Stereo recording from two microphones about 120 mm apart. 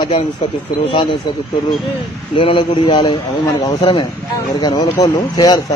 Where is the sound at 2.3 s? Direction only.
50° left (ahead or behind).